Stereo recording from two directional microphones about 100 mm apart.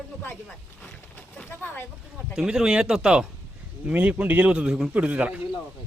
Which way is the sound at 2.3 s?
5° right (ahead or behind).